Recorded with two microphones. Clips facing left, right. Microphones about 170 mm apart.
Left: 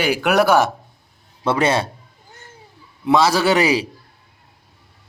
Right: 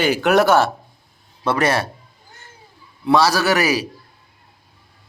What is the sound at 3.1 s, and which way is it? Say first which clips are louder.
Speech: left 1 dB; 20° left (ahead or behind).